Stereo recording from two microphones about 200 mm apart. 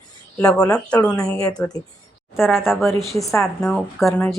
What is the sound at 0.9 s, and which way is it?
Speech, 5° left (ahead or behind).